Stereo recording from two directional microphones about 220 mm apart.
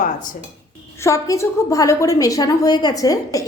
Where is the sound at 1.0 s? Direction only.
15° left (ahead or behind).